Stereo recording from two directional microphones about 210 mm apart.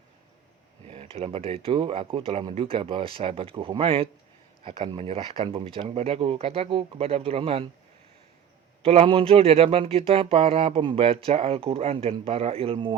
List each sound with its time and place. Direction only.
0.9 s speech: 30° right (ahead or behind)
8.8 s speech: 30° right (ahead or behind)